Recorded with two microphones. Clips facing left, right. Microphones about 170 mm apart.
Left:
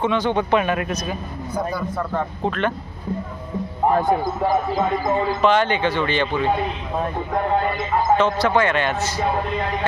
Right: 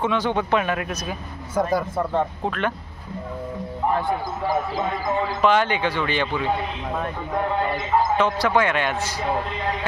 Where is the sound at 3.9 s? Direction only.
40° left (ahead or behind).